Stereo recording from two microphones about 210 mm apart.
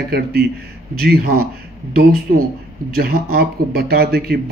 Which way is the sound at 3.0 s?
45° right (ahead or behind).